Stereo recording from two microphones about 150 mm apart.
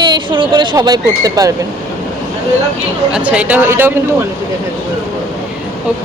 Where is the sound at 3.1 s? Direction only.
10° right (ahead or behind).